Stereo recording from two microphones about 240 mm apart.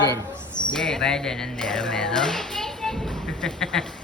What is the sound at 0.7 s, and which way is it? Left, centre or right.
Speech, centre.